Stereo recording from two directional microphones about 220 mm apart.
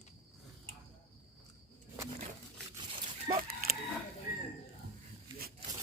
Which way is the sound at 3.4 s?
40° right (ahead or behind).